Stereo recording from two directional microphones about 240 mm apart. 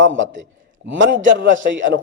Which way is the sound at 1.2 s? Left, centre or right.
Right.